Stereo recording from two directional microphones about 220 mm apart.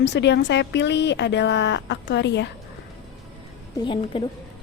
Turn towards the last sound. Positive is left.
turn(degrees=20)  # may be behind; listen again after turning